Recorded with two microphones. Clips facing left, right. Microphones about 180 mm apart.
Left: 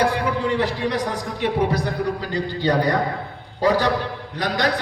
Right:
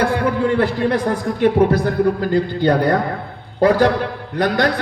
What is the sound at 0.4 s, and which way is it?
A man's voice, 50° right (ahead or behind).